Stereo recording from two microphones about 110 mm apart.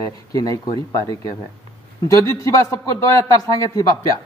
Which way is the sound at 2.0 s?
25° left (ahead or behind).